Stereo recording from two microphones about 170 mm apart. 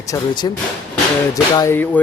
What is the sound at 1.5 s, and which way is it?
Speech, 15° left (ahead or behind).